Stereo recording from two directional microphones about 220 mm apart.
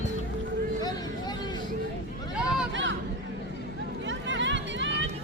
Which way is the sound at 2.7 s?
55° right (ahead or behind).